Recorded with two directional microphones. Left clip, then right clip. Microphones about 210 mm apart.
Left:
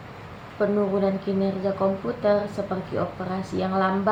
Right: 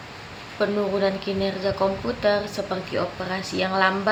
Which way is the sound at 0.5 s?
30° right (ahead or behind).